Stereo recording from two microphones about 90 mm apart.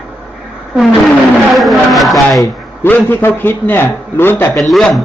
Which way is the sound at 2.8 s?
20° left (ahead or behind).